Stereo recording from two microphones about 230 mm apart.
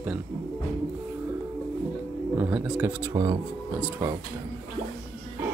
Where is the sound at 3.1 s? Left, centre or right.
Centre.